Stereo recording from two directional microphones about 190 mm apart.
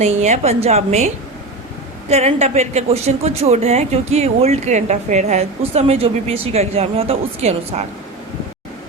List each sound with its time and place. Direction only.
0.0 s a woman's voice: 35° right (ahead or behind)